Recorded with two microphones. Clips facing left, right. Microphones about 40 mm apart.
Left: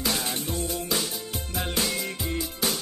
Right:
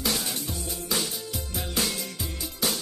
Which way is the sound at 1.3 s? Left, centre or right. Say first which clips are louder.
Left 3 dB; left.